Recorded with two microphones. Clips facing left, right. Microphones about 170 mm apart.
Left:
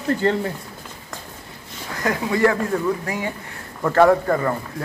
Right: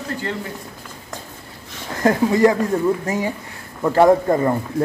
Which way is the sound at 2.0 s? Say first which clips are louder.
Right 5 dB; 25° right (ahead or behind).